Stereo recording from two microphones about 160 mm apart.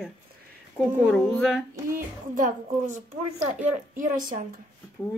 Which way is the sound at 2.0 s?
55° right (ahead or behind).